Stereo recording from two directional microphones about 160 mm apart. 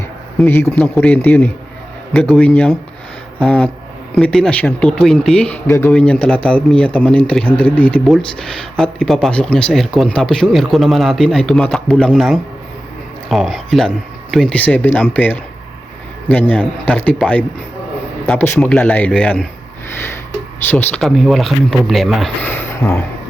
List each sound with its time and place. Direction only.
0.4 s a man's voice: 15° left (ahead or behind)
5.6 s a man's voice: 15° left (ahead or behind)
5.9 s a man's voice: 5° left (ahead or behind)
20.7 s speech: 10° left (ahead or behind)
22.4 s speech: 15° left (ahead or behind)